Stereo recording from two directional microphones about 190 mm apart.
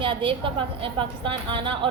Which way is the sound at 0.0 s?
25° right (ahead or behind).